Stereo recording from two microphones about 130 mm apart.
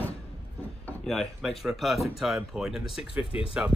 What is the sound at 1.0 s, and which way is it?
Speech, centre (ahead or behind).